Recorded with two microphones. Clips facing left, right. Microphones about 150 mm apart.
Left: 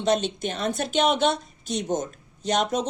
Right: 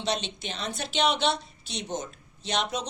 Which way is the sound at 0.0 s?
45° left (ahead or behind).